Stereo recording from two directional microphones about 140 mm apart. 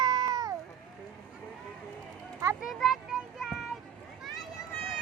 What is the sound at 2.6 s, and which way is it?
Children playing, centre (ahead or behind).